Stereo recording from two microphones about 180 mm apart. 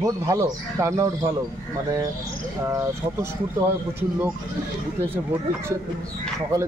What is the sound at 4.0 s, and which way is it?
Speech, 10° right (ahead or behind).